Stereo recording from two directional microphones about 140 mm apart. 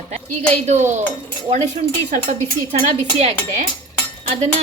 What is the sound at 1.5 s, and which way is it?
Speech, 55° right (ahead or behind).